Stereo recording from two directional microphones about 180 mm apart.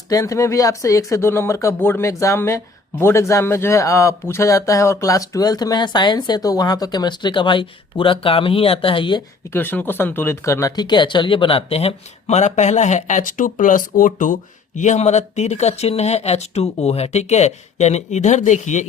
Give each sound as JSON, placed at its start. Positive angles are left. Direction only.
{"t": 0.1, "sound": "speech", "side_deg": 20}
{"t": 9.5, "sound": "speech", "side_deg": 10}